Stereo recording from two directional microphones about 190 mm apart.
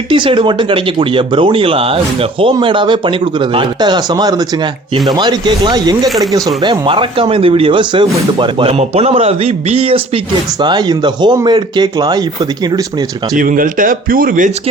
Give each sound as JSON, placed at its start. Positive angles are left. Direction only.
{"t": 0.1, "sound": "speech", "side_deg": -25}
{"t": 13.3, "sound": "speech", "side_deg": -45}